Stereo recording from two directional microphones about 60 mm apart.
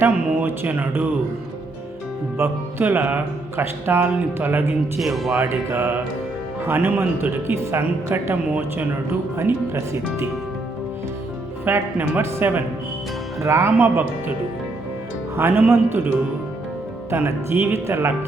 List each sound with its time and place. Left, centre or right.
0.0 s a sound: right
2.4 s speech: right
3.6 s speech: right
4.9 s speech: centre
5.5 s speech: right
9.4 s speech: right
11.6 s speech: right
13.4 s speech: right
13.7 s speech: right
15.4 s speech: right
17.5 s speech: right